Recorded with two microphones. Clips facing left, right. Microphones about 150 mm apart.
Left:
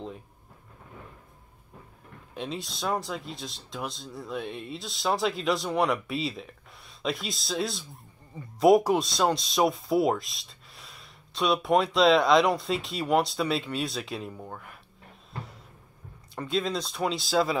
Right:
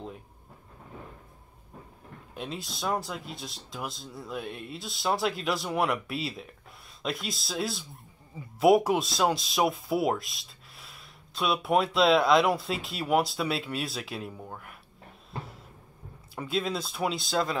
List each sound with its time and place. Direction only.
2.3 s speech: centre (ahead or behind)
16.3 s speech: 5° right (ahead or behind)